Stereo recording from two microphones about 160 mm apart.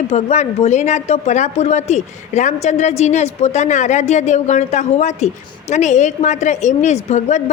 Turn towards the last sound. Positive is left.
turn(degrees=45)  # may be behind; listen again after turning